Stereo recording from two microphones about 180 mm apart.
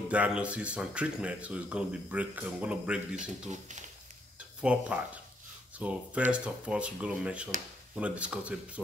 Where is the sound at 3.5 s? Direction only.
40° right (ahead or behind).